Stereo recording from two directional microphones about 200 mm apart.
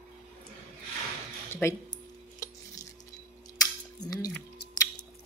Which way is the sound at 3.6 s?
20° left (ahead or behind).